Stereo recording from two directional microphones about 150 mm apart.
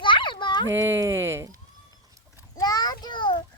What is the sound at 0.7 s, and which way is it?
Speech, 20° right (ahead or behind).